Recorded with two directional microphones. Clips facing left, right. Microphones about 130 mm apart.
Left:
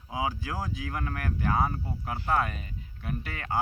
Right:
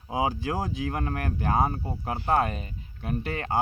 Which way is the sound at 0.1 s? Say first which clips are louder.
Right 5 dB; 25° right (ahead or behind).